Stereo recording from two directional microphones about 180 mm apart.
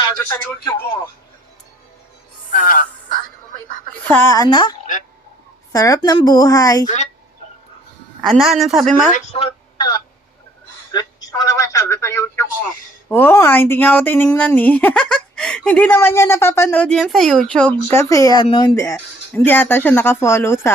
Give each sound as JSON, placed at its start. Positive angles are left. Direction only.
{"t": 0.2, "sound": "speech", "side_deg": 15}
{"t": 2.5, "sound": "speech", "side_deg": 45}
{"t": 4.0, "sound": "a man's voice", "side_deg": 10}
{"t": 5.7, "sound": "a man's voice", "side_deg": 20}
{"t": 6.8, "sound": "speech", "side_deg": 40}
{"t": 8.2, "sound": "speech", "side_deg": 0}
{"t": 9.1, "sound": "a man's voice", "side_deg": 30}
{"t": 18.9, "sound": "speech", "side_deg": 10}